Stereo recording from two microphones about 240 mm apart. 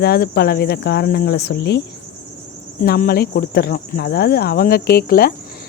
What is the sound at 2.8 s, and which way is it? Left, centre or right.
Speech, left.